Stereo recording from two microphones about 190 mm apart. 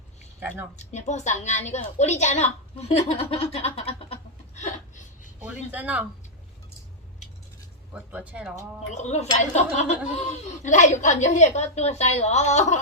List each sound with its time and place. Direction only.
0.3 s a woman's voice: 10° right (ahead or behind)
0.8 s speech: 40° left (ahead or behind)
3.2 s a sound: 30° left (ahead or behind)
5.4 s speech: 10° right (ahead or behind)
7.9 s speech: 5° right (ahead or behind)
9.0 s speech: 35° left (ahead or behind)